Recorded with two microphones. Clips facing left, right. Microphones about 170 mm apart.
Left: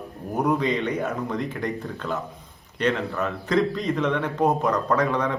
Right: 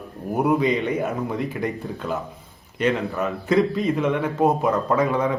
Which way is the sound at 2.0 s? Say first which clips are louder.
Right 2 dB; 20° right (ahead or behind).